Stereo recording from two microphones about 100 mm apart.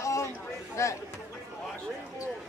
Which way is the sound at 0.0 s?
30° left (ahead or behind).